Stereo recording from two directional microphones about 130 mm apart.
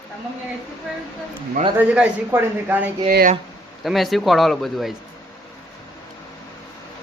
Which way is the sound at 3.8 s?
Centre (ahead or behind).